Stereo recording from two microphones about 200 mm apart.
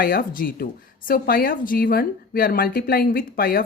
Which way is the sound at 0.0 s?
45° left (ahead or behind).